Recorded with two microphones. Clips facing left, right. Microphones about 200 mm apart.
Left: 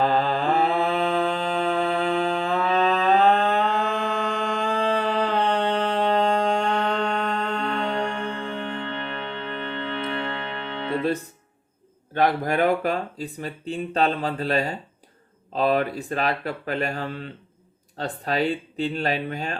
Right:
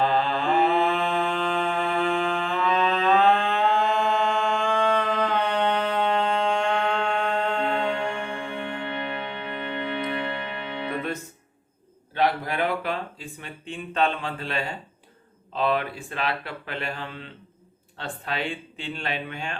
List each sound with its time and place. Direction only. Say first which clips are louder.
0.0 s mantra: left 2 dB; 40° left (ahead or behind)
8.4 s music: left 1 dB; 15° right (ahead or behind)
12.1 s speech: left 3 dB; 45° left (ahead or behind)